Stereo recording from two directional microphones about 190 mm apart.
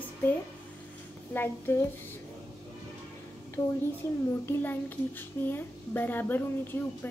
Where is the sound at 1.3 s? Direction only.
10° left (ahead or behind).